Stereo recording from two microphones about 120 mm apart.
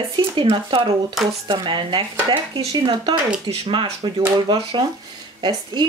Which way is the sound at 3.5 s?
50° right (ahead or behind).